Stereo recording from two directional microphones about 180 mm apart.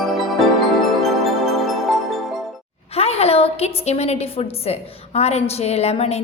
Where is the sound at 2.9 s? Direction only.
35° left (ahead or behind).